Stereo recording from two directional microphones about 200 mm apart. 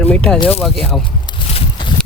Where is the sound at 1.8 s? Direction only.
25° left (ahead or behind).